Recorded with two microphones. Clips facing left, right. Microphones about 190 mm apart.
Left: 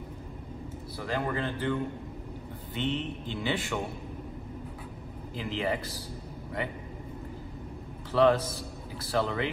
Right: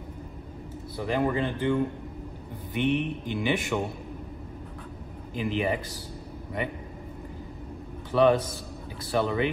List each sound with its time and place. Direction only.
0.9 s speech: 20° right (ahead or behind)
5.3 s speech: 15° right (ahead or behind)
8.1 s a man's voice: 15° right (ahead or behind)